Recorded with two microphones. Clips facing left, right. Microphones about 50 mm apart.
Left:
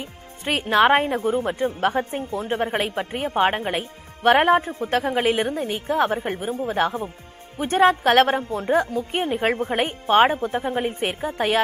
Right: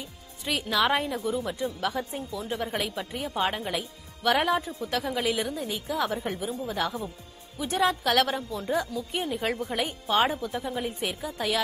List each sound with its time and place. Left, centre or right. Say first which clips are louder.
0.5 s a woman's voice: left 8 dB; left